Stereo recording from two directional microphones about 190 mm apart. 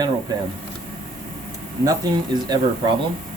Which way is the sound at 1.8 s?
20° right (ahead or behind).